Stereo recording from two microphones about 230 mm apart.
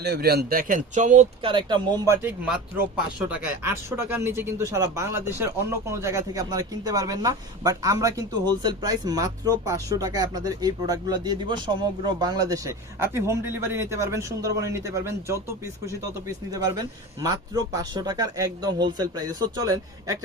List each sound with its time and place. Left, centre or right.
0.0 s speech: right; by 20.1 s centre